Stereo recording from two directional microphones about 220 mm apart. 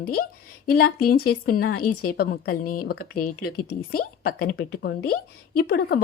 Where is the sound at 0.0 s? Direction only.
45° left (ahead or behind).